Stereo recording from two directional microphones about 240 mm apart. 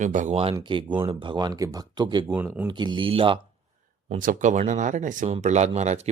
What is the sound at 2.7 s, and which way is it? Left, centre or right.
Speech, centre.